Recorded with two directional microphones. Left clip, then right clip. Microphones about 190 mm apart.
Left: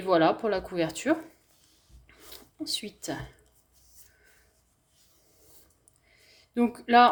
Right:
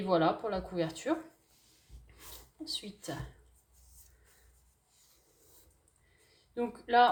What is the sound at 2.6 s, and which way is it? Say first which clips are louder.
Speech: left 6 dB; 45° left (ahead or behind).